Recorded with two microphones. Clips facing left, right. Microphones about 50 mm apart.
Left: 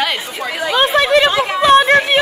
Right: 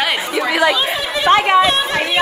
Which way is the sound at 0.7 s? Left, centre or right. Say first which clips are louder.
Left 7 dB; left.